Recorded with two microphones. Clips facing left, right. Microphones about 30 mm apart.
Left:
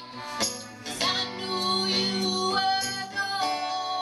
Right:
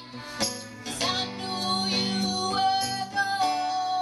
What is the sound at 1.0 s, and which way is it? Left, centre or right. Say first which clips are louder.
Music: left 1 dB; centre.